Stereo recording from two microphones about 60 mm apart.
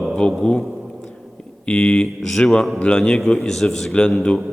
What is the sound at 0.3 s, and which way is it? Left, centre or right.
Speech, centre.